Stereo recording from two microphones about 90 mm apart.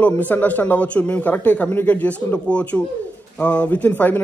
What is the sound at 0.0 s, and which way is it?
Speech, 20° left (ahead or behind).